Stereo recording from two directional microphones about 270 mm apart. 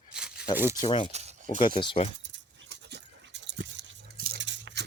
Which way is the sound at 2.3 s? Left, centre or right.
Right.